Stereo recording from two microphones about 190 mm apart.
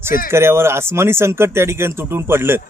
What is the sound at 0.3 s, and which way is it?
Speech, 15° right (ahead or behind).